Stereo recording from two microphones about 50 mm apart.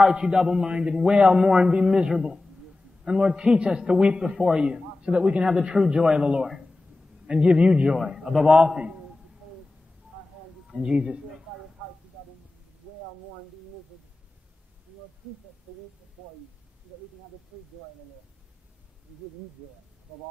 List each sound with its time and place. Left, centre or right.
0.0 s a man's voice: centre
10.7 s a man's voice: centre